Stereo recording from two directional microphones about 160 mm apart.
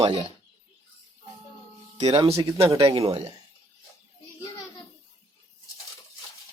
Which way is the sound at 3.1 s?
40° right (ahead or behind).